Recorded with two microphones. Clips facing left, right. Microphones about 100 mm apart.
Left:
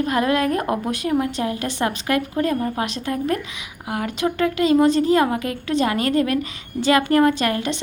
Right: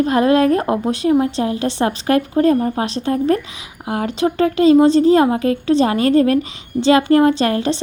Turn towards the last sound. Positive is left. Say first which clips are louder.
# right 4 dB
turn(degrees=-30)  # may be behind; listen again after turning